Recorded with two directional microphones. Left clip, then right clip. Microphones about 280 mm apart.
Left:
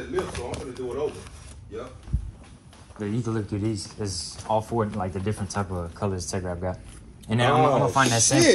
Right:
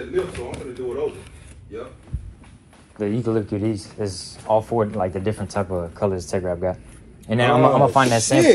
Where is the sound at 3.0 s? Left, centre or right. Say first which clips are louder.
Right 7 dB; centre.